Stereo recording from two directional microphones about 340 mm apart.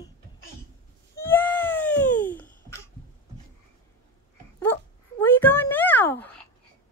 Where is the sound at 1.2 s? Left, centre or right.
Centre.